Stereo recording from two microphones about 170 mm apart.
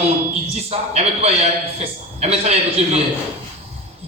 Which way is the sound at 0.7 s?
35° right (ahead or behind).